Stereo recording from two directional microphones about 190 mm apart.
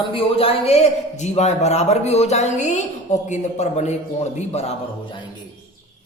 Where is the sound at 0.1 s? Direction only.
30° left (ahead or behind).